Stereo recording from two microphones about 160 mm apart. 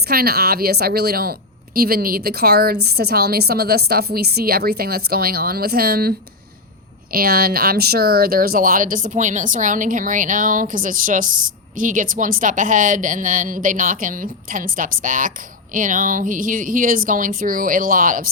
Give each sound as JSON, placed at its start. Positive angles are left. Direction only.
{"t": 0.1, "sound": "a woman's voice", "side_deg": -70}